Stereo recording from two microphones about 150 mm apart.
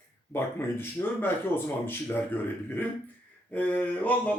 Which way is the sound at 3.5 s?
10° left (ahead or behind).